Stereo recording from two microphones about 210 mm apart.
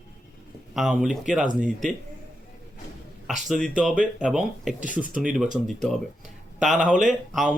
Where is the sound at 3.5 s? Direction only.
Centre (ahead or behind).